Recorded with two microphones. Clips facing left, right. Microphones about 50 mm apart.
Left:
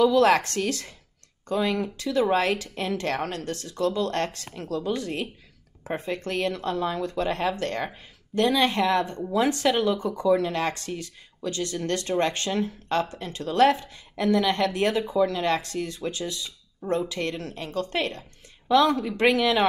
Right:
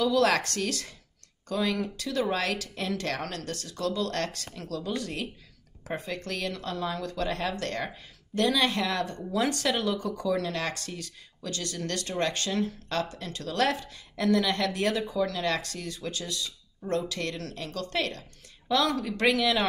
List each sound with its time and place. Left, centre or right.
0.0 s speech: left